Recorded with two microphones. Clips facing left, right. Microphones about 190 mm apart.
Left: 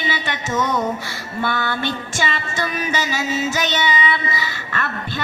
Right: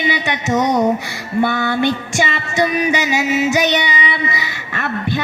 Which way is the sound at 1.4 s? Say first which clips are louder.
Right 4 dB; 20° right (ahead or behind).